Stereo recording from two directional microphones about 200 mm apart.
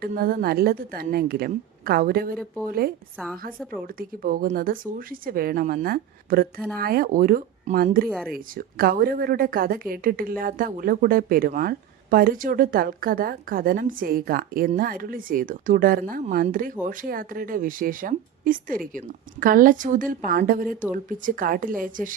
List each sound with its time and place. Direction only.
0.0 s a woman's voice: 45° right (ahead or behind)
8.0 s speech: 5° left (ahead or behind)
8.3 s a woman's voice: 50° right (ahead or behind)